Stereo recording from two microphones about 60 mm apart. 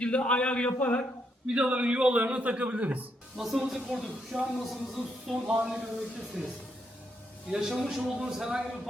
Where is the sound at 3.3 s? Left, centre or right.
Centre.